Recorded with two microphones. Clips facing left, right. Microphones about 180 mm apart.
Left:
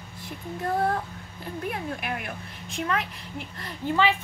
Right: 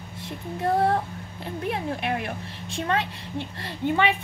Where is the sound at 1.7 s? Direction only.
25° right (ahead or behind).